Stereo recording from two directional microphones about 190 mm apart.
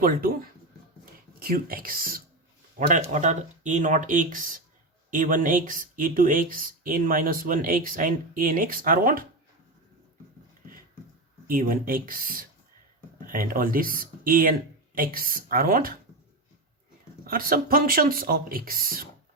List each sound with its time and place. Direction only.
0.0 s speech: 50° right (ahead or behind)
1.4 s speech: 50° right (ahead or behind)
11.4 s speech: 50° right (ahead or behind)
17.2 s speech: 50° right (ahead or behind)